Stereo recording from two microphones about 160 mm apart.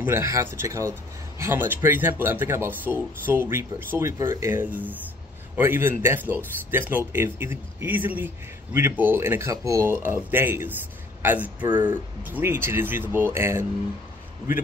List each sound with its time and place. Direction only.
0.0 s speech: 15° right (ahead or behind)